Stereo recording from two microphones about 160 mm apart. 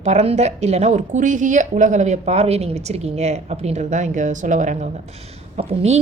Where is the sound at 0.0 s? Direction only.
45° right (ahead or behind).